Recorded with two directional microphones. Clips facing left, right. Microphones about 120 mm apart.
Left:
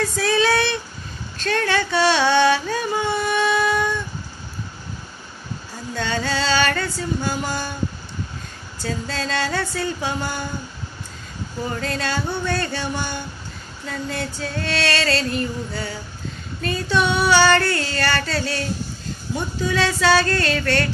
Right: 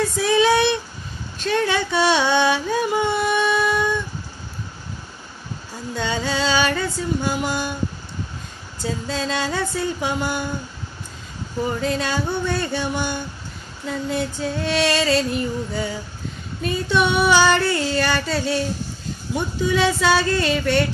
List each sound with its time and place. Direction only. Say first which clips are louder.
0.2 s a sound: right 3 dB; 15° right (ahead or behind)
1.4 s music: right 1 dB; 15° right (ahead or behind)
5.9 s music: even; 15° right (ahead or behind)
8.8 s music: right 2 dB; 15° right (ahead or behind)
11.8 s music: right 2 dB; 15° right (ahead or behind)